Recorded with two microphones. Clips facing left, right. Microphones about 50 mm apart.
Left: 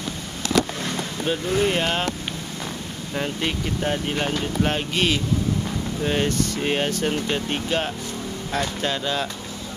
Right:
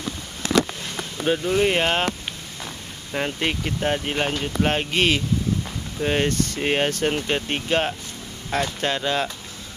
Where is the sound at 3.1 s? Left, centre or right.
Right.